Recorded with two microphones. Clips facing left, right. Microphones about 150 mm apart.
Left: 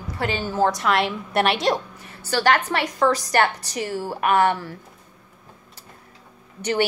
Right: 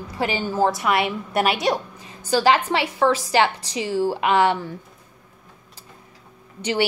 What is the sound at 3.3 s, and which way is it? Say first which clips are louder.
A woman's voice: right 1 dB; 10° right (ahead or behind).